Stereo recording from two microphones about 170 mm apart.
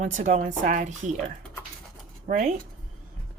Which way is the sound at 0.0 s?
45° right (ahead or behind).